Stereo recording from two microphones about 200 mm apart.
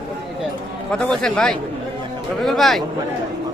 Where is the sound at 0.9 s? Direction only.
5° left (ahead or behind).